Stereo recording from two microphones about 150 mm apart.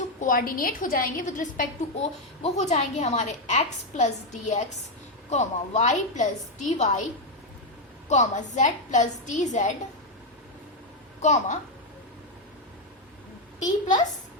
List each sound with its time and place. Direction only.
0.2 s a woman's voice: 65° left (ahead or behind)
2.4 s a woman's voice: 45° left (ahead or behind)
8.1 s a woman's voice: 50° left (ahead or behind)
11.2 s a woman's voice: 50° left (ahead or behind)